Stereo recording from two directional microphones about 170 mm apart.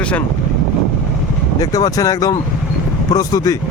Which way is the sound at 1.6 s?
20° left (ahead or behind).